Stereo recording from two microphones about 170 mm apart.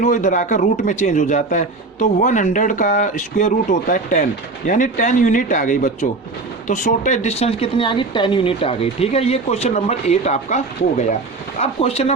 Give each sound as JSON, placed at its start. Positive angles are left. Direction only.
{"t": 0.0, "sound": "speech", "side_deg": 45}